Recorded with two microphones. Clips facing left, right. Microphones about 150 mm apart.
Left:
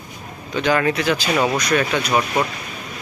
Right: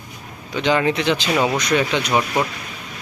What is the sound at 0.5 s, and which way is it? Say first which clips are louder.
Speech: even; 20° right (ahead or behind).